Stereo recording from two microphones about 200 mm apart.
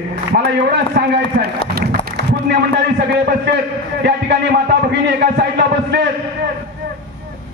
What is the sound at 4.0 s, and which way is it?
A man's voice, 55° right (ahead or behind).